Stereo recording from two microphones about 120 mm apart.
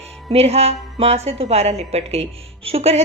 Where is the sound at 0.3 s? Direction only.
60° right (ahead or behind).